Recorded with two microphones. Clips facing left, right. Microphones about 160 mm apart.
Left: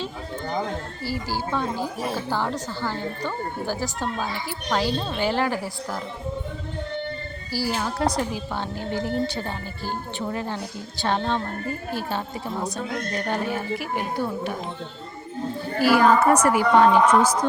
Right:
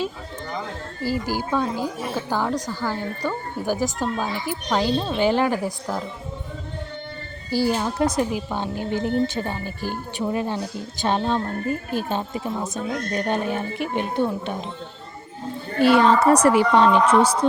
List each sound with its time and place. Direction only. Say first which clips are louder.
1.0 s speech: right 5 dB; 15° right (ahead or behind)
7.5 s a woman's voice: right 5 dB; 20° right (ahead or behind)
15.8 s a woman's voice: right 2 dB; 25° right (ahead or behind)